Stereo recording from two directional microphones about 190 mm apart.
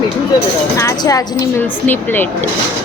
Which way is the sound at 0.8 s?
15° left (ahead or behind).